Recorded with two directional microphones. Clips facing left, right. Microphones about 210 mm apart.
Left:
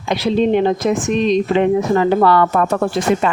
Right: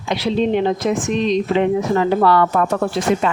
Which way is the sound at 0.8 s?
50° left (ahead or behind).